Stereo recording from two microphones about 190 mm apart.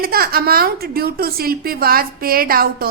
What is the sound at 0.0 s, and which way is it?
A woman's voice, 50° right (ahead or behind).